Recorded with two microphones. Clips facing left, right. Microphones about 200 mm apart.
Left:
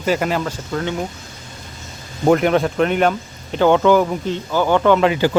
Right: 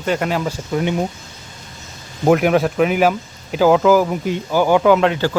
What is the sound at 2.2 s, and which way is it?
Speech, 5° right (ahead or behind).